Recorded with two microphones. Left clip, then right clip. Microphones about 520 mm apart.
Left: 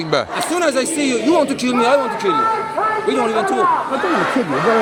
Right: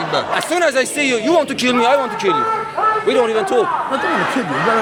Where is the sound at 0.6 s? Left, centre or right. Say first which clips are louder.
Right 1 dB; right.